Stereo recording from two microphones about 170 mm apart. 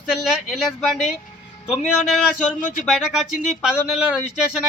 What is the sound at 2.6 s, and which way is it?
Speech, 50° left (ahead or behind).